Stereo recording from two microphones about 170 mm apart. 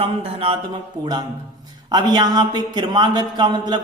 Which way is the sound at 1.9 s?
25° right (ahead or behind).